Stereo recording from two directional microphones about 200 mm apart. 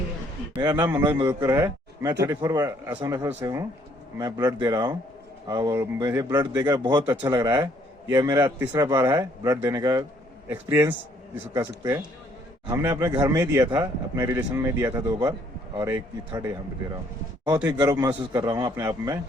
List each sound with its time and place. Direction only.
0.5 s a man's voice: 10° right (ahead or behind)
17.7 s a man's voice: 15° right (ahead or behind)